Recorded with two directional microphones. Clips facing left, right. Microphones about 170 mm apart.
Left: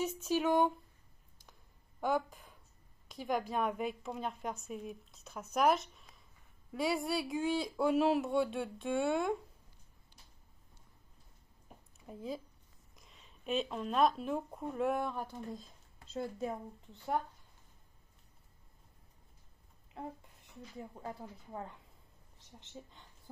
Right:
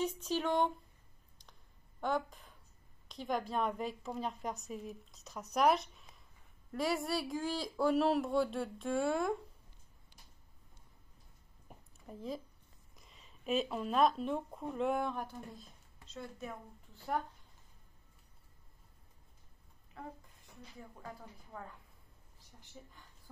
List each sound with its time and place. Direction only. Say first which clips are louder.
0.0 s speech: left 2 dB; 5° left (ahead or behind)
2.0 s a woman's voice: left 2 dB; 5° left (ahead or behind)
12.1 s a woman's voice: left 1 dB; centre (ahead or behind)
20.0 s speech: left 3 dB; 25° left (ahead or behind)